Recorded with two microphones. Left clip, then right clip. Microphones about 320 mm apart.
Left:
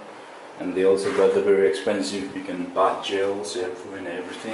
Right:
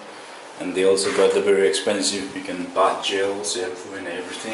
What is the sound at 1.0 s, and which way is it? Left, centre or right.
A man's voice, centre.